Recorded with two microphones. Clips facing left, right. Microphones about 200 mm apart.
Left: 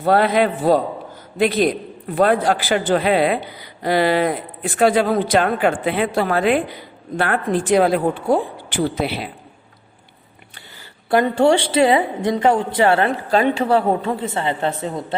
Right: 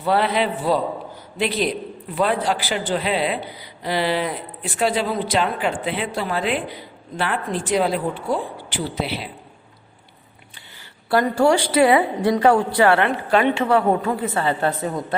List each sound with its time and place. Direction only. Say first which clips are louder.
0.0 s speech: left 4 dB; 45° left (ahead or behind)
11.1 s a woman's voice: left 2 dB; 20° left (ahead or behind)